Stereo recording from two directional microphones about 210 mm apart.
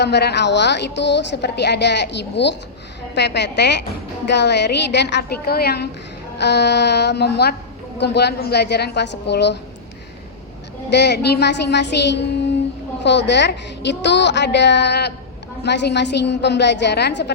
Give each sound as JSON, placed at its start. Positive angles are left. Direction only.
{"t": 0.0, "sound": "a woman's voice", "side_deg": 55}
{"t": 10.9, "sound": "a woman's voice", "side_deg": 55}